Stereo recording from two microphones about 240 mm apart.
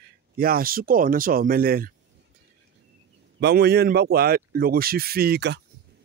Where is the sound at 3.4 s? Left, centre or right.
Right.